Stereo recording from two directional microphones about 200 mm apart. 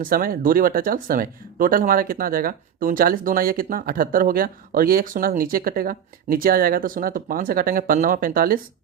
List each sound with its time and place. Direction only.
0.0 s speech: 45° right (ahead or behind)